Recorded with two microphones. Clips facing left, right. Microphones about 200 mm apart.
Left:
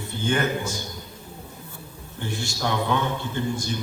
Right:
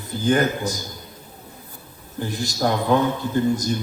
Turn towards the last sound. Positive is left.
turn(degrees=-40)  # may be behind; listen again after turning